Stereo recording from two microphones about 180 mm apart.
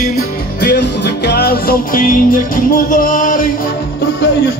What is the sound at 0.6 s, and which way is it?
Music, 65° left (ahead or behind).